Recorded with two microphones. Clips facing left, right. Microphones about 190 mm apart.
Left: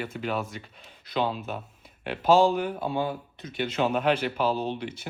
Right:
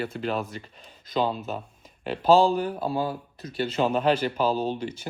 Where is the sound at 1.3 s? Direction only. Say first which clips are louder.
Right 2 dB; 40° right (ahead or behind).